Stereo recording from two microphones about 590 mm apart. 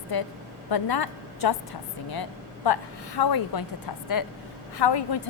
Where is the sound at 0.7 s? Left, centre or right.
Left.